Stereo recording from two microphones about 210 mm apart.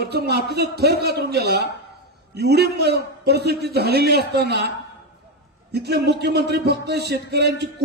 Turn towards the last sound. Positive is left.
turn(degrees=-50)  # may be behind; listen again after turning